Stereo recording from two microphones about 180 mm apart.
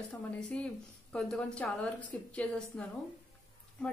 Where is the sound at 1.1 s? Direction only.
5° left (ahead or behind).